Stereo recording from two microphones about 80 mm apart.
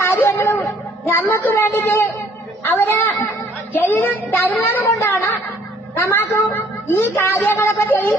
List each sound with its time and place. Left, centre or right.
0.0 s a sound: left
1.0 s music: left
1.5 s a woman's voice: left
4.9 s a woman's voice: left